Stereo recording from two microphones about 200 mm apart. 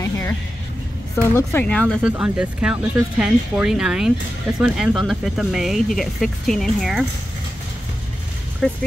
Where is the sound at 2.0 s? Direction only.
5° right (ahead or behind).